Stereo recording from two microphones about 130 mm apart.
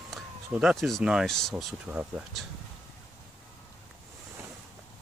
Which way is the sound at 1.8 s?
10° right (ahead or behind).